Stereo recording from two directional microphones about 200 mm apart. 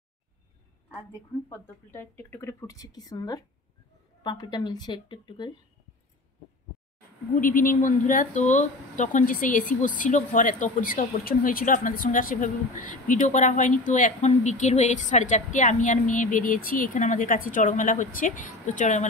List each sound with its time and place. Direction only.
1.5 s a woman's voice: 10° left (ahead or behind)
7.3 s a woman's voice: 45° left (ahead or behind)